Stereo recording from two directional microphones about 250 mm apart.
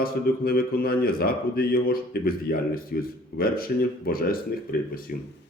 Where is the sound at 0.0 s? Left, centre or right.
Left.